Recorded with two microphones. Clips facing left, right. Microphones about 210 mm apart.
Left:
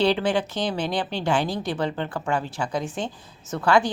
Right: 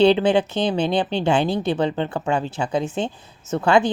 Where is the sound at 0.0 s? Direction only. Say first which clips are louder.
Right 6 dB; 25° right (ahead or behind).